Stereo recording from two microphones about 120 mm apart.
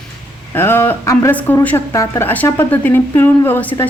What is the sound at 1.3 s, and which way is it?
Speech, 15° left (ahead or behind).